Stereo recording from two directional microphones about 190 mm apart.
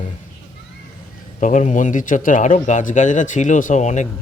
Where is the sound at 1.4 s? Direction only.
40° left (ahead or behind).